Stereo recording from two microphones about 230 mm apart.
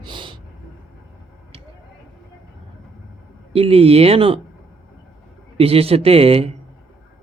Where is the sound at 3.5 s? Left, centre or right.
Right.